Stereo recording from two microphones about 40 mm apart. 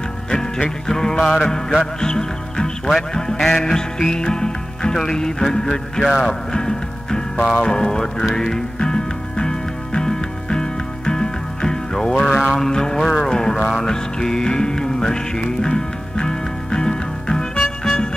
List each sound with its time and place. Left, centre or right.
0.3 s music: centre